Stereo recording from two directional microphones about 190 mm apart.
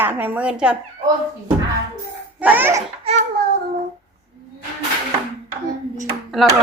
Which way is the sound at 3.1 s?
35° right (ahead or behind).